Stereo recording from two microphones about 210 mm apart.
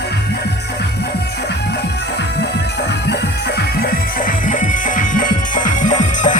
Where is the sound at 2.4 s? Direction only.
55° left (ahead or behind).